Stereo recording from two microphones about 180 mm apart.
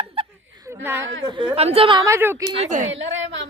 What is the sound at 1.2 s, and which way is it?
Speech, 25° right (ahead or behind).